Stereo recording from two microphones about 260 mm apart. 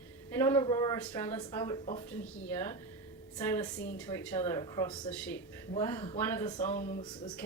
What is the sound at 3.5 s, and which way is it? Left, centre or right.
A woman's voice, centre.